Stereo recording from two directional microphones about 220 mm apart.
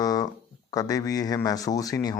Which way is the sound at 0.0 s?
15° left (ahead or behind).